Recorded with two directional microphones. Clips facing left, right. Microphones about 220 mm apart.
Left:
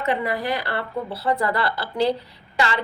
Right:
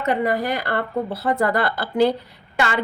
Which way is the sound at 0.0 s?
45° right (ahead or behind).